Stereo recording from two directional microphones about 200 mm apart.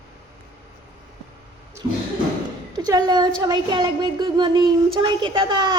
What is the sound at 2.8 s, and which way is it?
A woman's voice, 20° right (ahead or behind).